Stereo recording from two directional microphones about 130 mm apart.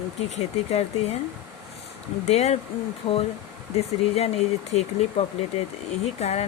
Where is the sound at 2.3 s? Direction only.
60° left (ahead or behind).